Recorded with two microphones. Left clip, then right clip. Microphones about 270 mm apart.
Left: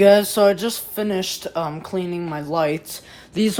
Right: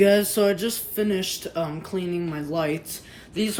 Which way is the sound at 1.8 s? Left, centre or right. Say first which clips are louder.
Left 4 dB; left.